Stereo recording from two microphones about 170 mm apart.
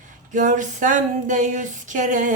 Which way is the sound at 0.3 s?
50° right (ahead or behind).